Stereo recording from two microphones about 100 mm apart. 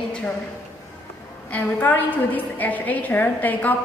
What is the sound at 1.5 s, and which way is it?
A woman's voice, 15° left (ahead or behind).